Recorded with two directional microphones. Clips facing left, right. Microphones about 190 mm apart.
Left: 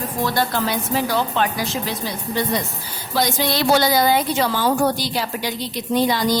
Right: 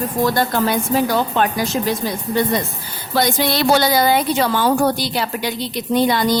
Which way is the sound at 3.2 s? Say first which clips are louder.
Right 3 dB; 60° right (ahead or behind).